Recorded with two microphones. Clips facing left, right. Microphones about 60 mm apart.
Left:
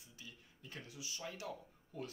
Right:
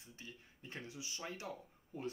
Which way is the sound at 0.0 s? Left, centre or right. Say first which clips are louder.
Right 3 dB; right.